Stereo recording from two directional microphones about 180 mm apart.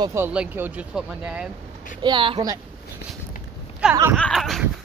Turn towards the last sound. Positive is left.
turn(degrees=0)  # may be behind; listen again after turning